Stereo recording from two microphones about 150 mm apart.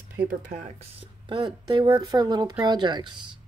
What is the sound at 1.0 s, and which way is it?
Speech, 35° right (ahead or behind).